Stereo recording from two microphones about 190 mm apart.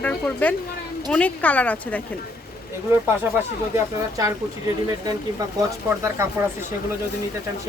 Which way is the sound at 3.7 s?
15° right (ahead or behind).